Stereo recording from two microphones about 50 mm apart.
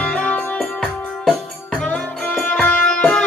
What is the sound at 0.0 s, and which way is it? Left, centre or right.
Music, left.